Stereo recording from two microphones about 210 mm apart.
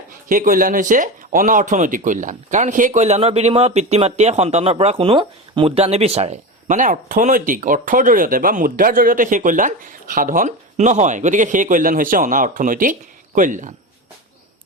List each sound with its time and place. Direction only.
0.1 s speech: 40° right (ahead or behind)